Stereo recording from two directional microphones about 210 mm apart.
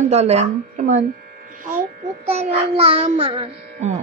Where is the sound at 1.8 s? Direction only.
30° right (ahead or behind).